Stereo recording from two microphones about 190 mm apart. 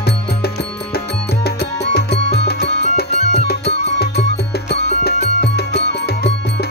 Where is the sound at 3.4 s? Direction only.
55° left (ahead or behind).